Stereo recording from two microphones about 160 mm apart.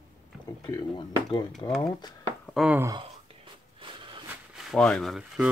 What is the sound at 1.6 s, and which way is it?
Speech, 20° left (ahead or behind).